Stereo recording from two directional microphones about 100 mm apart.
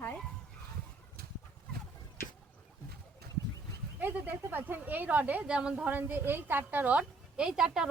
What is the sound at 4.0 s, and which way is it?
A woman's voice, 20° right (ahead or behind).